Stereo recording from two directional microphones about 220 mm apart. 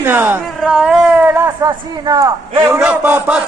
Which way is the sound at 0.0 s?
10° right (ahead or behind).